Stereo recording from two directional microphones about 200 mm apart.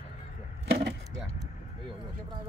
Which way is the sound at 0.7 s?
55° right (ahead or behind).